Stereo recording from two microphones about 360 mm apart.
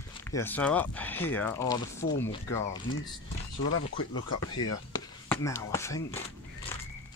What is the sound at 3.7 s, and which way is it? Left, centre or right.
Speech, left.